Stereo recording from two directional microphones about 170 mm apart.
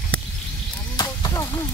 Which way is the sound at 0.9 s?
20° left (ahead or behind).